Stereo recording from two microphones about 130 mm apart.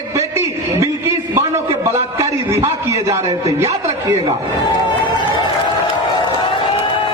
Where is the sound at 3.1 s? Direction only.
25° right (ahead or behind).